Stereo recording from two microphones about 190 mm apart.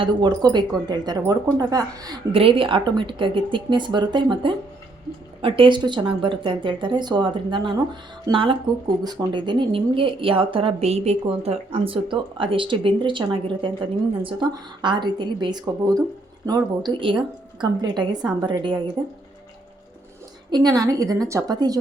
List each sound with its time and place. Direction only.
0.0 s speech: 25° right (ahead or behind)
20.5 s speech: 20° right (ahead or behind)